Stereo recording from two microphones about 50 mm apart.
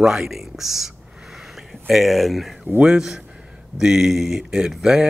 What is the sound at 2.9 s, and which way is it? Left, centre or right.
Speech, centre.